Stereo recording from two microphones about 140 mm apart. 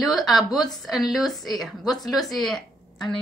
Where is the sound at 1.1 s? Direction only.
Centre (ahead or behind).